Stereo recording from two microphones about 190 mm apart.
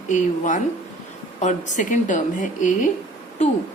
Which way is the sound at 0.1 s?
40° left (ahead or behind).